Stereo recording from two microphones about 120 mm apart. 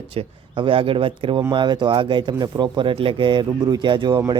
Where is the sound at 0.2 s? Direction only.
45° right (ahead or behind).